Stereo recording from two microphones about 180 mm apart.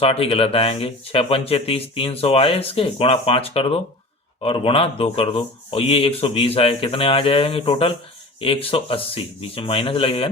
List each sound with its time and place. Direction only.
0.0 s speech: 30° left (ahead or behind)